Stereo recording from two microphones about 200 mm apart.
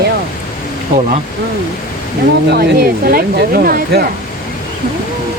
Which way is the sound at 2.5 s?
50° right (ahead or behind).